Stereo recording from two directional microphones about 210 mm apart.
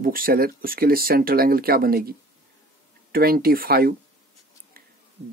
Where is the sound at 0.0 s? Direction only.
45° right (ahead or behind).